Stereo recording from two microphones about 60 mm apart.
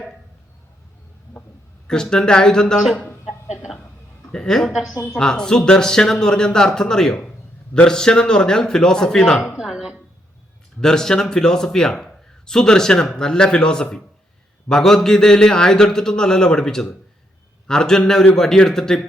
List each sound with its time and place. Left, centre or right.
1.9 s a man's voice: centre
2.8 s a man's voice: centre
4.3 s a woman's voice: centre
4.9 s a woman's voice: left
5.2 s a man's voice: centre
9.6 s a sound: centre
10.8 s a man's voice: centre